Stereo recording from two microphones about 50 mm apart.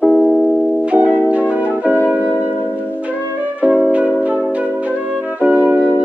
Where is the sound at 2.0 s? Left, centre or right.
Right.